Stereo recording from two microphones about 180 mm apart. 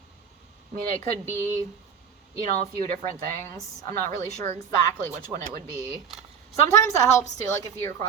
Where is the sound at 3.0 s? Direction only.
15° left (ahead or behind).